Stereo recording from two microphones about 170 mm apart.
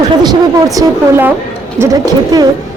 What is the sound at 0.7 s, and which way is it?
Speech, 10° right (ahead or behind).